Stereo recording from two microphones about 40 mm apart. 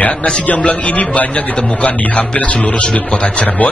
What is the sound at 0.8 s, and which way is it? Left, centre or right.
Speech, left.